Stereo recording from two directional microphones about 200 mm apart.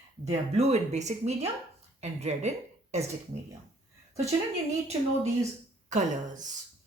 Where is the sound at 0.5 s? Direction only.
35° right (ahead or behind).